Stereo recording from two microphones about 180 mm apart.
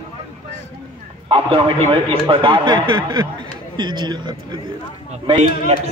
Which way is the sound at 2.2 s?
25° right (ahead or behind).